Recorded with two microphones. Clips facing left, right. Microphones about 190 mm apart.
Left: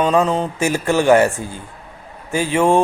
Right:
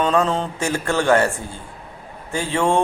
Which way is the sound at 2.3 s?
15° left (ahead or behind).